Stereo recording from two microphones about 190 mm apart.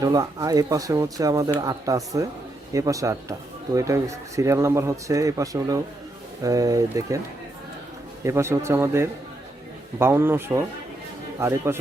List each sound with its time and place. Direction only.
0.0 s speech: 20° right (ahead or behind)
8.2 s speech: 15° right (ahead or behind)